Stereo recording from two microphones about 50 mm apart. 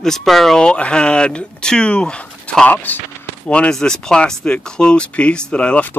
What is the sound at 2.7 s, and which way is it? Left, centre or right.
Speech, left.